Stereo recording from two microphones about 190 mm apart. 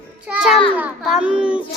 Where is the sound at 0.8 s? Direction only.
5° right (ahead or behind).